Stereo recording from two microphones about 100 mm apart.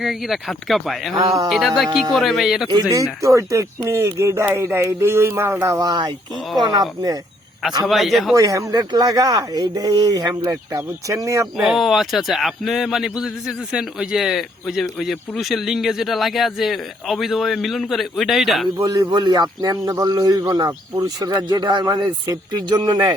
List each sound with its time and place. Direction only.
0.0 s a man's voice: centre (ahead or behind)
2.9 s speech: 30° right (ahead or behind)
5.9 s a man's voice: 45° right (ahead or behind)
7.9 s a man's voice: centre (ahead or behind)
8.4 s speech: 35° right (ahead or behind)
11.5 s a man's voice: 5° right (ahead or behind)
18.8 s a man's voice: 40° right (ahead or behind)